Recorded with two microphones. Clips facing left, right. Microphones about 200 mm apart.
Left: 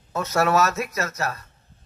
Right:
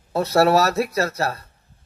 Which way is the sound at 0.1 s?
35° right (ahead or behind).